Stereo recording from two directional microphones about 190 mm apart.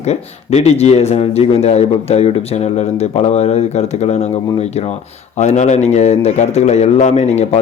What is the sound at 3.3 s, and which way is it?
Speech, 35° left (ahead or behind).